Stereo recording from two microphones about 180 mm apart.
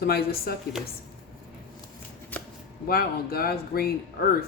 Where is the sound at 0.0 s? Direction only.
60° left (ahead or behind).